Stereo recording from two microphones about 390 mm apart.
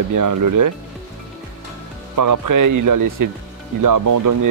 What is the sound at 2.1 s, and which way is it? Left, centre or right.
Speech, right.